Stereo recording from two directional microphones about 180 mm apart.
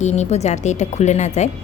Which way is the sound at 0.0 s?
40° left (ahead or behind).